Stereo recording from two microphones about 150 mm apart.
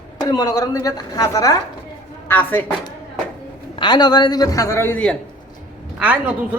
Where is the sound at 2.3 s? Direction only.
10° left (ahead or behind).